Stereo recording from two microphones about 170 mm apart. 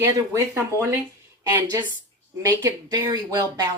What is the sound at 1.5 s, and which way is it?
Speech, 15° right (ahead or behind).